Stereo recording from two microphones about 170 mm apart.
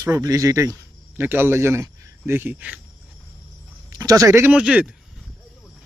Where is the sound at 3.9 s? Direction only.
20° right (ahead or behind).